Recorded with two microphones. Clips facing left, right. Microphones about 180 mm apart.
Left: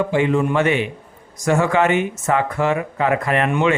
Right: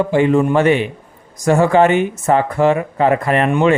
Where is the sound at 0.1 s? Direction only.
40° right (ahead or behind).